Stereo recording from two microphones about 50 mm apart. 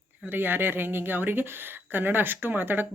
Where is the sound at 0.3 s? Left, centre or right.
Right.